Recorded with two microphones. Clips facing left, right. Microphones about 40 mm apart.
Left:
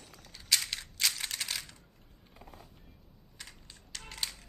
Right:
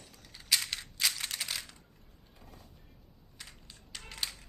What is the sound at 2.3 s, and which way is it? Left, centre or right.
Music, left.